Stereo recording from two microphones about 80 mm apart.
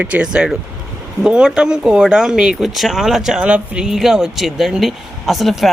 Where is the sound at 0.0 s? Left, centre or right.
Centre.